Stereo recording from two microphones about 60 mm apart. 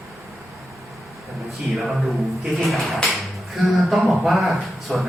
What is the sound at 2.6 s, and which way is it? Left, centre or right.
Speech, centre.